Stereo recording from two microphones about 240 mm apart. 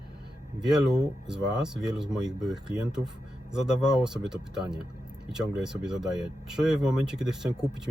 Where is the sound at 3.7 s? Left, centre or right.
Centre.